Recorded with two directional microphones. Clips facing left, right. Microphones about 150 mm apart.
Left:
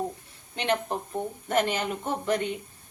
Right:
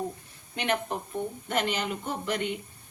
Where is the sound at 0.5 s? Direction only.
30° left (ahead or behind).